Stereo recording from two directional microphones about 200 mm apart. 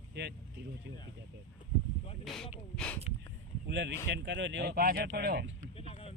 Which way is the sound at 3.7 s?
65° right (ahead or behind).